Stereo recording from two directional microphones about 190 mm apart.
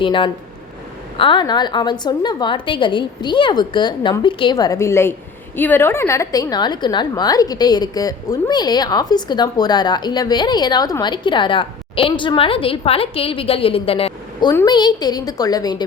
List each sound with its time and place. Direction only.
0.0 s a woman's voice: 25° left (ahead or behind)